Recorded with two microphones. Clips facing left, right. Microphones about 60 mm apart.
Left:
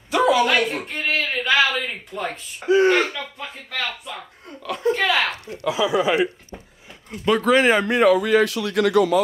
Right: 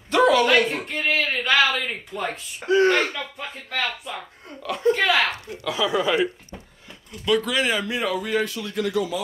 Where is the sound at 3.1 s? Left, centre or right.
Centre.